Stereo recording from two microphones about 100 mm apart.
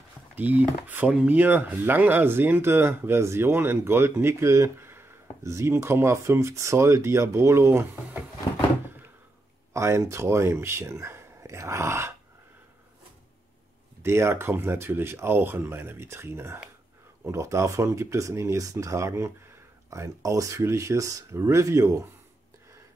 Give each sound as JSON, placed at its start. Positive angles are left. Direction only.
{"t": 0.4, "sound": "speech", "side_deg": -15}
{"t": 9.8, "sound": "speech", "side_deg": -30}
{"t": 14.0, "sound": "speech", "side_deg": -25}